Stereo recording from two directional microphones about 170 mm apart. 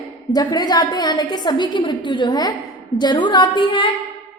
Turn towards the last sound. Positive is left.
turn(degrees=30)  # may be behind; listen again after turning